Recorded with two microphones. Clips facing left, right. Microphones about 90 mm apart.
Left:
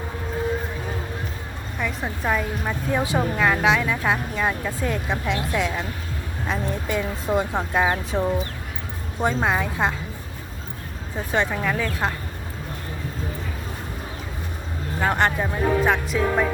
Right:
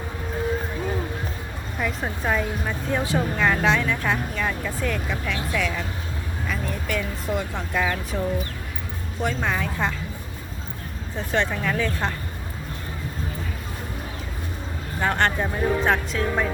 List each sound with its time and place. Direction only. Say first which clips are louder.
1.8 s speech: even; centre (ahead or behind)
2.9 s speech: left 1 dB; 20° left (ahead or behind)
3.3 s speech: left 1 dB; 5° left (ahead or behind)
4.0 s speech: left 2 dB; 15° left (ahead or behind)
9.2 s speech: left 3 dB; 20° left (ahead or behind)
11.3 s speech: left 1 dB; 10° left (ahead or behind)
15.0 s speech: left 1 dB; 10° left (ahead or behind)